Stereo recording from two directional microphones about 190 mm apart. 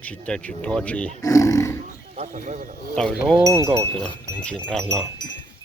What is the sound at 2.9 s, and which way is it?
Speech, 5° left (ahead or behind).